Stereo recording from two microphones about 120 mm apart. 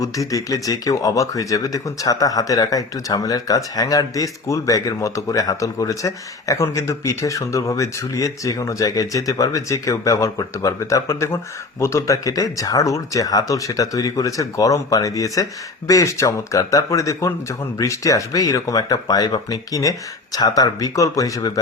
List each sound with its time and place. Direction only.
0.0 s speech: 30° left (ahead or behind)